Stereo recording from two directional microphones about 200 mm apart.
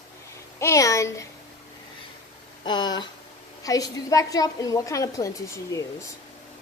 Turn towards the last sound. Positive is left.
turn(degrees=15)  # may be behind; listen again after turning